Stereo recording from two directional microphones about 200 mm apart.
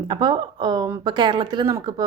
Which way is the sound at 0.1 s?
20° right (ahead or behind).